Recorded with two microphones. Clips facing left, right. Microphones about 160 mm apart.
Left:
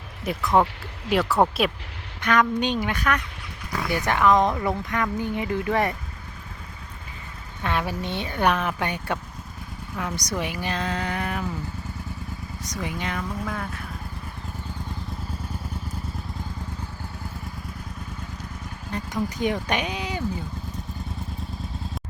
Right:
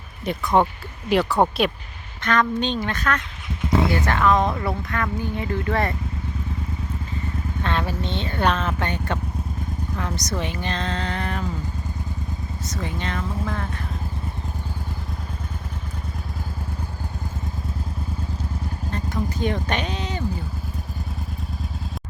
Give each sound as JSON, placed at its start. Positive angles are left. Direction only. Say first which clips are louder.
{"t": 0.3, "sound": "speech", "louder": "right 1 dB", "side_deg": 0}
{"t": 3.6, "sound": "a sound", "louder": "right 7 dB", "side_deg": -25}
{"t": 4.0, "sound": "speech", "louder": "even", "side_deg": 15}
{"t": 7.6, "sound": "speech", "louder": "even", "side_deg": 10}
{"t": 10.2, "sound": "speech", "louder": "right 1 dB", "side_deg": 10}
{"t": 12.6, "sound": "speech", "louder": "right 1 dB", "side_deg": 15}
{"t": 18.9, "sound": "a sound", "louder": "even", "side_deg": 15}
{"t": 19.6, "sound": "speech", "louder": "even", "side_deg": 10}